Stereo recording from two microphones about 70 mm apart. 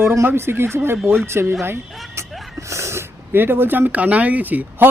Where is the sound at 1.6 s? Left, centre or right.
Right.